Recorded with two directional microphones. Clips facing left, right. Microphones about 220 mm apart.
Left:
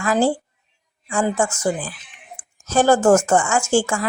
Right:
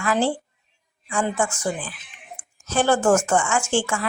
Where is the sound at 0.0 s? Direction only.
40° left (ahead or behind).